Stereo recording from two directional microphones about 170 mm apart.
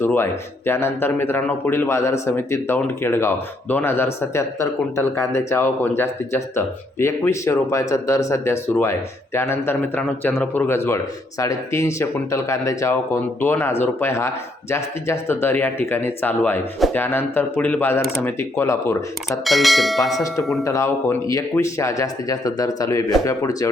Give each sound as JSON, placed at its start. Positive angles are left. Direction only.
{"t": 0.0, "sound": "speech", "side_deg": 15}
{"t": 19.5, "sound": "speech", "side_deg": 0}
{"t": 20.7, "sound": "speech", "side_deg": 15}